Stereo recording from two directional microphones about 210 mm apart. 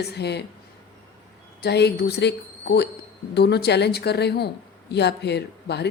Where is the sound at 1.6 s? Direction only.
50° left (ahead or behind).